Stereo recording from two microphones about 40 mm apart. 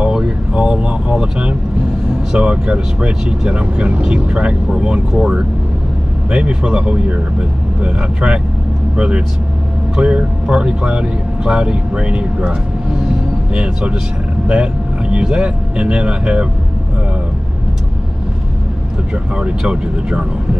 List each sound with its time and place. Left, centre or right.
0.0 s vehicle: centre
2.3 s speech: right
6.3 s speech: right
19.7 s speech: right